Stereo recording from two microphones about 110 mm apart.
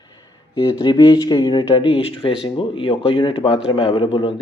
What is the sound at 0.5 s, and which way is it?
Speech, 40° left (ahead or behind).